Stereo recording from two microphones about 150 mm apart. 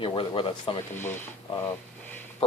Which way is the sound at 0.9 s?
15° left (ahead or behind).